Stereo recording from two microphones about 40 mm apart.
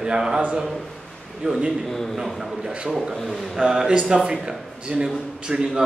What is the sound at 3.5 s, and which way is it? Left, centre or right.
Speech, centre.